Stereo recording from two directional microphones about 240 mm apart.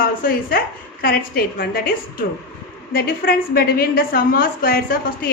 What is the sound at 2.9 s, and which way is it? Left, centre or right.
A woman's voice, left.